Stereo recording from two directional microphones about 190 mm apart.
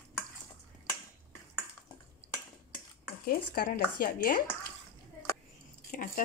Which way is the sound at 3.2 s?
50° left (ahead or behind).